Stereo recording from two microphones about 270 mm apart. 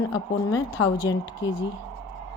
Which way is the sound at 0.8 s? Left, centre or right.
Left.